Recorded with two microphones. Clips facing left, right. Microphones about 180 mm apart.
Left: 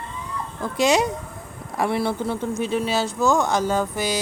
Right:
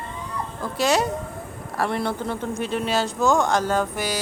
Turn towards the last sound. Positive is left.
turn(degrees=-10)  # may be behind; listen again after turning